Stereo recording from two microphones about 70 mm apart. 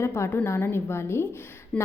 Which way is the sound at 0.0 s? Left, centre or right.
Left.